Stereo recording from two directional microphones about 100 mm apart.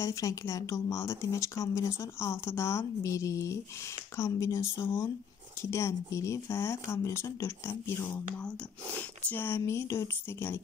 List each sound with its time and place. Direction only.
0.0 s speech: 35° left (ahead or behind)
9.3 s speech: 25° left (ahead or behind)